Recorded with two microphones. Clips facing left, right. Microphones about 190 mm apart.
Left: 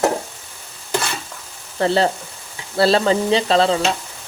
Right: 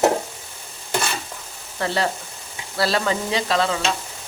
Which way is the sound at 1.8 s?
30° left (ahead or behind).